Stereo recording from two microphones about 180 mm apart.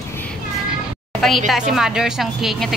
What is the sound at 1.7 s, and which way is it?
A woman's voice, 5° right (ahead or behind).